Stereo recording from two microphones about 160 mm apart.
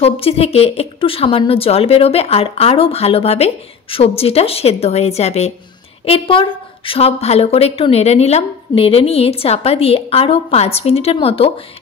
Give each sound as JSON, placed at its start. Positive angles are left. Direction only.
{"t": 0.0, "sound": "a woman's voice", "side_deg": 35}